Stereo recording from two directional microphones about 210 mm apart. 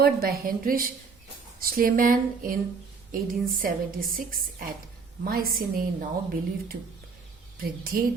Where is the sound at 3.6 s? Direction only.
40° right (ahead or behind).